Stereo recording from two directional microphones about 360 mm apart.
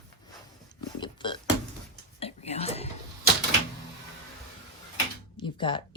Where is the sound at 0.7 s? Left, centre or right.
Centre.